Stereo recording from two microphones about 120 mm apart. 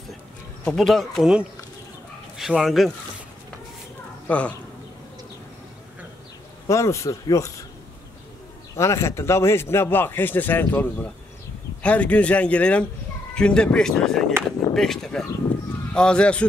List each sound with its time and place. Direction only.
0.7 s speech: 5° left (ahead or behind)
4.3 s speech: 10° left (ahead or behind)
6.7 s speech: 25° left (ahead or behind)
8.7 s speech: 25° left (ahead or behind)